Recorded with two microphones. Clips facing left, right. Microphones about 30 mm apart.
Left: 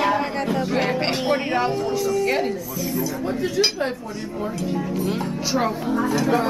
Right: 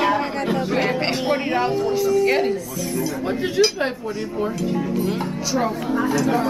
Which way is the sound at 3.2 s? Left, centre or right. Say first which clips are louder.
Right 4 dB; right.